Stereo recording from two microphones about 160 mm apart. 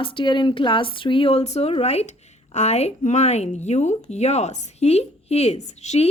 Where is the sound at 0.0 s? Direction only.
30° left (ahead or behind).